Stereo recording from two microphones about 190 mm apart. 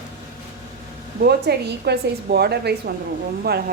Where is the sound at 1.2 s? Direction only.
55° right (ahead or behind).